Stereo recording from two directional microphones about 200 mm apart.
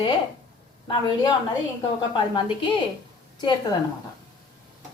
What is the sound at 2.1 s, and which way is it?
Speech, 25° left (ahead or behind).